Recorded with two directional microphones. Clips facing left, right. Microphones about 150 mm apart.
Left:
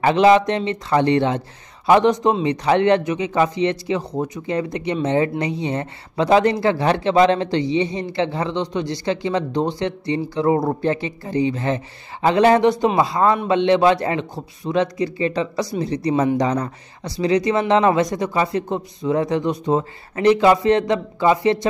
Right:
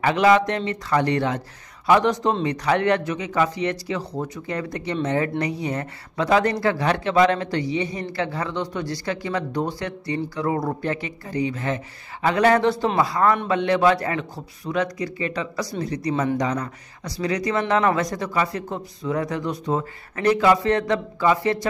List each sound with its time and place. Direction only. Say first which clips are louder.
0.0 s a man's voice: left 4 dB; 25° left (ahead or behind)